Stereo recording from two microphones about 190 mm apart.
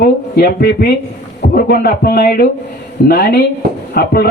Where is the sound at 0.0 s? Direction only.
50° left (ahead or behind).